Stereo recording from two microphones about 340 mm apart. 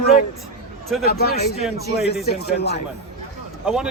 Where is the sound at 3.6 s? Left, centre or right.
Centre.